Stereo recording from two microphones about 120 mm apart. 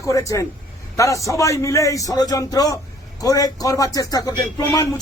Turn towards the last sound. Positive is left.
turn(degrees=20)  # may be behind; listen again after turning